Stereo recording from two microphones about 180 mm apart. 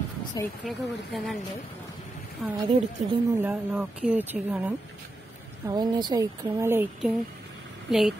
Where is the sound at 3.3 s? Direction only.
10° right (ahead or behind).